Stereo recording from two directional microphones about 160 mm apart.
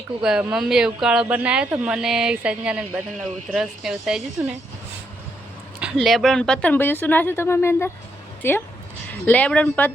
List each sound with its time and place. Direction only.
0.2 s speech: 5° right (ahead or behind)
5.8 s a woman's voice: centre (ahead or behind)